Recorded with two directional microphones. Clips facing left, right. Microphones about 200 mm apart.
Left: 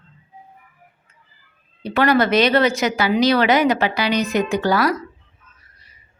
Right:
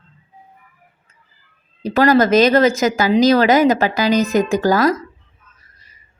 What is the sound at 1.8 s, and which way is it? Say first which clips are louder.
Speech: right 4 dB; 40° right (ahead or behind).